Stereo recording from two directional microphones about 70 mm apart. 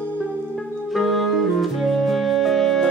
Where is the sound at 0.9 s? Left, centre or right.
Centre.